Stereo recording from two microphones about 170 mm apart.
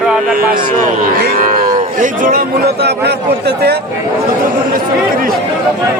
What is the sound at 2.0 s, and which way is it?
Speech, 55° right (ahead or behind).